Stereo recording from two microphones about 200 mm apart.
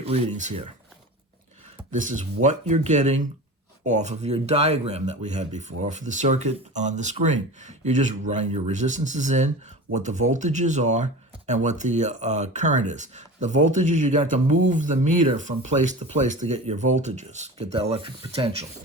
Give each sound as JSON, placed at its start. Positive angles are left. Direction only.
{"t": 0.0, "sound": "speech", "side_deg": -35}
{"t": 1.9, "sound": "speech", "side_deg": -40}